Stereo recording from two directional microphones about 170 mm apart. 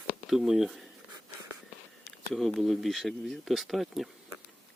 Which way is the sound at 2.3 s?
Centre (ahead or behind).